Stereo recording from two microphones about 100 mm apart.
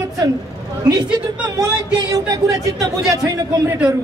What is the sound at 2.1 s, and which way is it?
Speech, 35° right (ahead or behind).